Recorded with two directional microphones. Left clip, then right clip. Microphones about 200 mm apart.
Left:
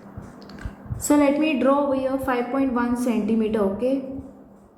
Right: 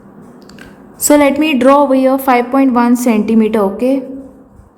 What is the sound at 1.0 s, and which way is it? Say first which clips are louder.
A woman's voice: right 10 dB; 40° right (ahead or behind).